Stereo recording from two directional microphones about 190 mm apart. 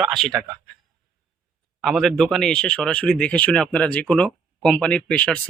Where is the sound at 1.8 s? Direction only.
Centre (ahead or behind).